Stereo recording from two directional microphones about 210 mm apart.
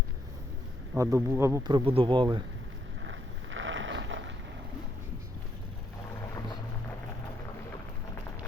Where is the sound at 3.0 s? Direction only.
65° right (ahead or behind).